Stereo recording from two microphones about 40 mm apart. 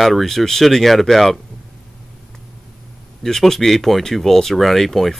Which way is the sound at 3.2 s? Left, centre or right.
Centre.